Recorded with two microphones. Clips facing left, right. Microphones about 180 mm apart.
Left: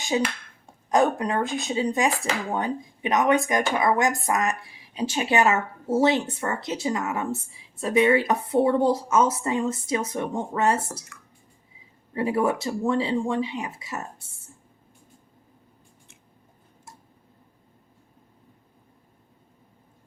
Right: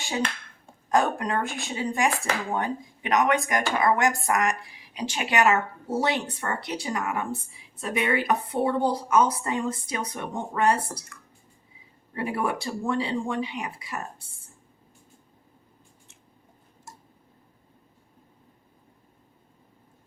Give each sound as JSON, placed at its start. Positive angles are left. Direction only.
{"t": 0.0, "sound": "speech", "side_deg": 15}
{"t": 12.1, "sound": "speech", "side_deg": 20}